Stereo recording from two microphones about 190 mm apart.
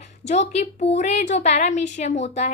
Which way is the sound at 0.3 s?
35° left (ahead or behind).